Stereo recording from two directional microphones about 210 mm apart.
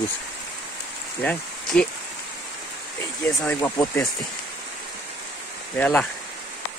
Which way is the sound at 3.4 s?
10° left (ahead or behind).